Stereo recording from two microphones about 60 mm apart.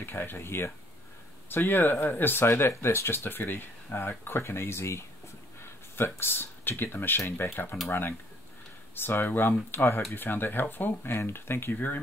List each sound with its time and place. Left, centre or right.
0.0 s speech: left
3.3 s speech: left
7.7 s speech: centre
8.9 s speech: left
11.7 s speech: left